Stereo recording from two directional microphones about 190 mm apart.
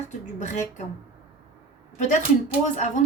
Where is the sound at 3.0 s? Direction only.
40° left (ahead or behind).